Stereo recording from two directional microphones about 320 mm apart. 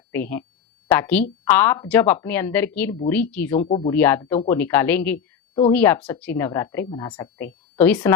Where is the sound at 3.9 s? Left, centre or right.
Centre.